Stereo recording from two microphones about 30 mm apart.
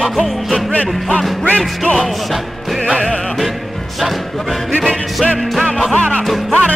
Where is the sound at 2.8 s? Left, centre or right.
Left.